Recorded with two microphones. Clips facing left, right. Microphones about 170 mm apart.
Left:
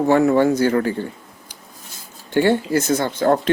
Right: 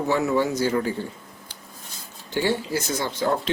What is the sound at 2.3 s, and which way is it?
Speech, 55° left (ahead or behind).